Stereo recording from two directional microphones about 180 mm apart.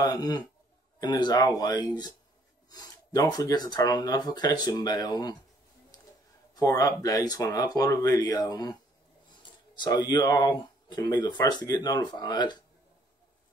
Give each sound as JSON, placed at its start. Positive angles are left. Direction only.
{"t": 0.0, "sound": "speech", "side_deg": 20}
{"t": 6.5, "sound": "speech", "side_deg": 20}
{"t": 9.8, "sound": "speech", "side_deg": 25}